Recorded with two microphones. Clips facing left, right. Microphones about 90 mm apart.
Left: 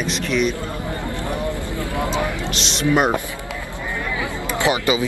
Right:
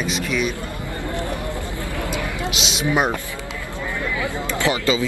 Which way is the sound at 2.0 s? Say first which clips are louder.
Left 5 dB; 20° left (ahead or behind).